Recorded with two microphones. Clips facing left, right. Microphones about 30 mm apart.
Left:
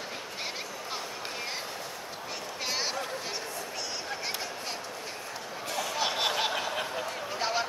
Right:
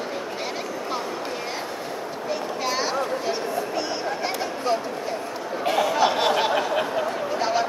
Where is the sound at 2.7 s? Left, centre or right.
Centre.